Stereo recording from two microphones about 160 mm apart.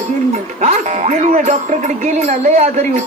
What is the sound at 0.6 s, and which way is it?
Speech, 50° right (ahead or behind).